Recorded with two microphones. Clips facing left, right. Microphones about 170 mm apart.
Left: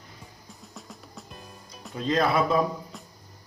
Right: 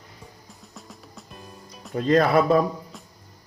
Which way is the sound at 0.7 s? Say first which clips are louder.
Even; centre (ahead or behind).